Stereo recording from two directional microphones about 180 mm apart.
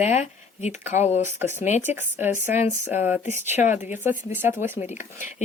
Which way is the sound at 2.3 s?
40° left (ahead or behind).